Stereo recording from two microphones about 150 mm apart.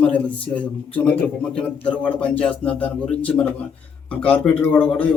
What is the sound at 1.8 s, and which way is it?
A man's voice, 10° left (ahead or behind).